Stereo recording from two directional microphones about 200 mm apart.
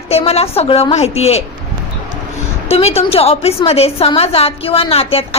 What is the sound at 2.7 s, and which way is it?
A woman's voice, 30° left (ahead or behind).